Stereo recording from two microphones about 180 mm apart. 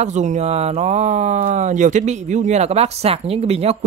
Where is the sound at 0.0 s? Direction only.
40° right (ahead or behind).